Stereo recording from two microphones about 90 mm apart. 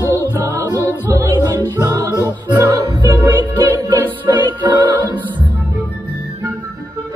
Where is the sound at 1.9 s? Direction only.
45° right (ahead or behind).